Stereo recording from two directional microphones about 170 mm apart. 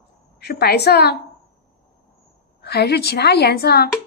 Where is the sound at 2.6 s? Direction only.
70° left (ahead or behind).